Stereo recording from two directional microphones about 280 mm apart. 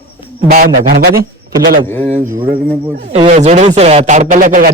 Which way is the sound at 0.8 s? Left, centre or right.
Right.